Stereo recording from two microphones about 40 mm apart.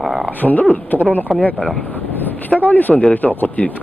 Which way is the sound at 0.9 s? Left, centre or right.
Left.